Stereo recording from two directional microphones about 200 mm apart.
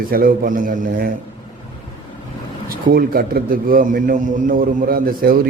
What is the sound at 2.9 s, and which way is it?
A man's voice, 45° right (ahead or behind).